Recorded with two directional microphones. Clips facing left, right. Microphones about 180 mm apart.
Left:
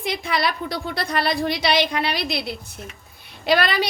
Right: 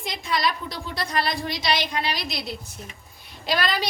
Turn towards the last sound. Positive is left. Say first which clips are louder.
# left 5 dB
turn(degrees=65)  # may be behind; listen again after turning